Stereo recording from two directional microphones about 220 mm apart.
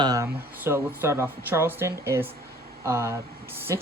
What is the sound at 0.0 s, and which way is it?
Speech, 15° right (ahead or behind).